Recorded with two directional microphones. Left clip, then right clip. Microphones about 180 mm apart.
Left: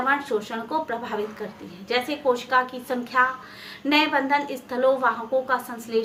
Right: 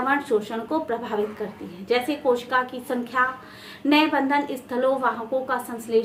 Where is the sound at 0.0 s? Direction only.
30° right (ahead or behind).